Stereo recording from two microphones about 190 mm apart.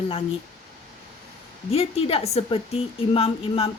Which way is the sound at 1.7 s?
30° left (ahead or behind).